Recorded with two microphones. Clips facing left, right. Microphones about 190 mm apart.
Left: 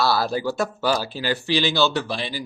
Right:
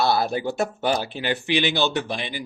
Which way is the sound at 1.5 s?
60° right (ahead or behind).